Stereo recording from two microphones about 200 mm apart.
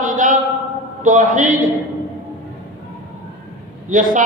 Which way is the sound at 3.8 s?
40° right (ahead or behind).